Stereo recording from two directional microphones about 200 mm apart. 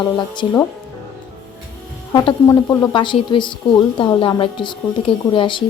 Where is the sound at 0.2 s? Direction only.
20° left (ahead or behind).